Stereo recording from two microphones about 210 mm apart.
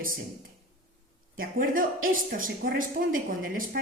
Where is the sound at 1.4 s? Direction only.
40° right (ahead or behind).